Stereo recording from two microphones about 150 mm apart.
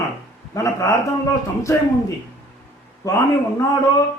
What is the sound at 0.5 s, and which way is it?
A man's voice, 20° left (ahead or behind).